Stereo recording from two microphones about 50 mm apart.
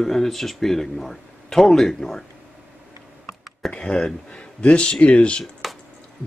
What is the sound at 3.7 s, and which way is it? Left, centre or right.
Speech, centre.